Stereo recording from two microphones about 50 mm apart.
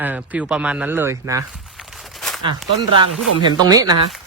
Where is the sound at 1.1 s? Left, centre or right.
Right.